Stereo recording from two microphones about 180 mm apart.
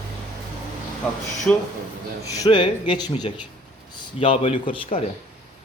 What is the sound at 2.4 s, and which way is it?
Speech, 25° left (ahead or behind).